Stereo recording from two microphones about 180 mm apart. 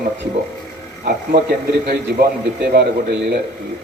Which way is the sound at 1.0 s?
60° right (ahead or behind).